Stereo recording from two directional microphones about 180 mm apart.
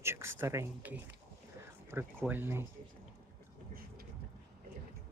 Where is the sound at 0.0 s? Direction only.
15° right (ahead or behind).